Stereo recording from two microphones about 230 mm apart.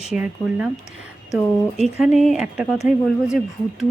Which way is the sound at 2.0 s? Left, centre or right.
Centre.